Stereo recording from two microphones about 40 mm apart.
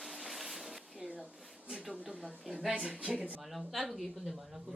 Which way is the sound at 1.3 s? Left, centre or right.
Centre.